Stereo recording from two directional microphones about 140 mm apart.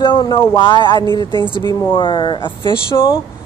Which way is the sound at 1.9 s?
35° left (ahead or behind).